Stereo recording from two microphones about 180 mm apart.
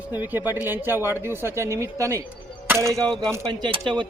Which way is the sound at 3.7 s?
25° right (ahead or behind).